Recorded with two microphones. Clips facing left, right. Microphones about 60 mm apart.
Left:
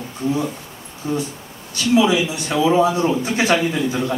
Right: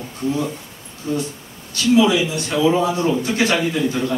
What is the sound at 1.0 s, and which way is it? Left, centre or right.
A man's voice, left.